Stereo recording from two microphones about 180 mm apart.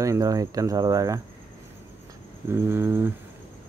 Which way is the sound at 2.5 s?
15° right (ahead or behind).